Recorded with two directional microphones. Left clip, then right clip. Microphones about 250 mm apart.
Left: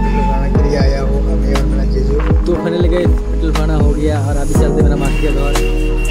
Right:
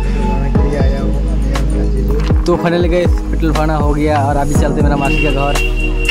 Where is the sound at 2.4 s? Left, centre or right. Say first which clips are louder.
Right 4 dB; right.